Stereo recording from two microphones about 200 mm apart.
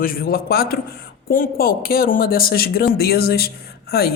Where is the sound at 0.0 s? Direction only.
45° left (ahead or behind).